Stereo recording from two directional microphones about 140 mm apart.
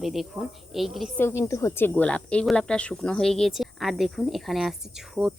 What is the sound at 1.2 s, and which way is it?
Speech, 20° left (ahead or behind).